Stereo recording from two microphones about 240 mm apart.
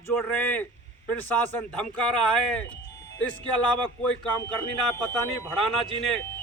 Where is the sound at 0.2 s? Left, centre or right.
Centre.